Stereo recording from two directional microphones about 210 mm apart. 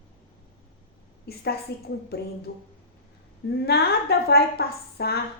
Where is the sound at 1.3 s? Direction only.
50° left (ahead or behind).